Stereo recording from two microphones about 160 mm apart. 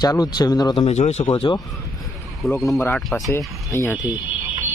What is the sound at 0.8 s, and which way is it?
Speech, 45° left (ahead or behind).